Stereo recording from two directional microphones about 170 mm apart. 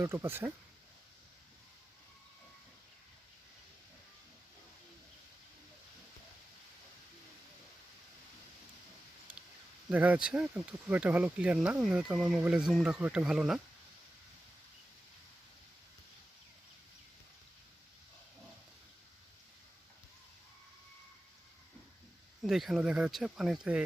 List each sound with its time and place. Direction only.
0.0 s speech: 15° right (ahead or behind)
9.9 s speech: 10° right (ahead or behind)
22.4 s speech: centre (ahead or behind)